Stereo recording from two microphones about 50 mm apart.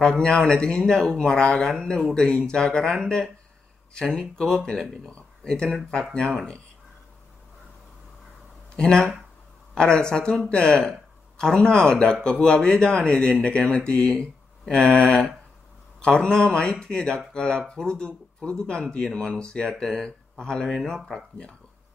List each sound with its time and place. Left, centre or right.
0.0 s speech: centre
8.7 s speech: centre